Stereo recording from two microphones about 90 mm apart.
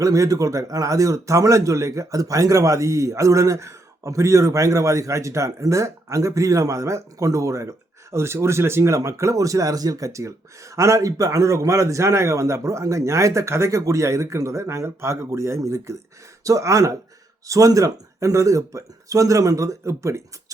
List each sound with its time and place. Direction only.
0.0 s speech: 40° right (ahead or behind)